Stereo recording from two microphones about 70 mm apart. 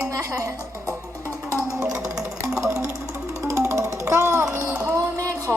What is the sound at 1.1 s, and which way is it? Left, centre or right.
Music, right.